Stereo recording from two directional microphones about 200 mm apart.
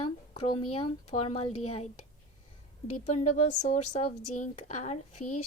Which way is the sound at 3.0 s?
35° left (ahead or behind).